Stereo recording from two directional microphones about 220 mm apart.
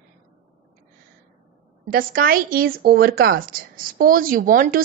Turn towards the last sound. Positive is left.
turn(degrees=-40)  # may be behind; listen again after turning